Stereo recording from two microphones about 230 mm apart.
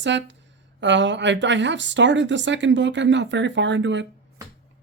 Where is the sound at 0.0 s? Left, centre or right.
Right.